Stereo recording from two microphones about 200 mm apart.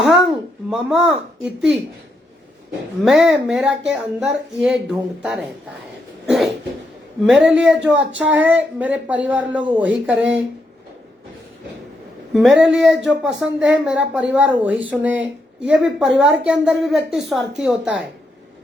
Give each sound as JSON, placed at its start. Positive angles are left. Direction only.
{"t": 0.0, "sound": "a child's voice", "side_deg": 0}
{"t": 3.0, "sound": "a woman's voice", "side_deg": 0}
{"t": 6.2, "sound": "cough", "side_deg": 0}
{"t": 7.3, "sound": "a woman's voice", "side_deg": 0}
{"t": 12.3, "sound": "a woman's voice", "side_deg": 0}